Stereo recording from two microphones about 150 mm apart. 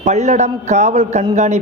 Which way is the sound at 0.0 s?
50° right (ahead or behind).